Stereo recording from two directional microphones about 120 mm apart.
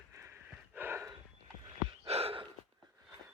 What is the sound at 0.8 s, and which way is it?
Snort, 20° right (ahead or behind).